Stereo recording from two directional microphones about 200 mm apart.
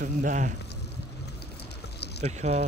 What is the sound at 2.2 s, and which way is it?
Speech, 35° right (ahead or behind).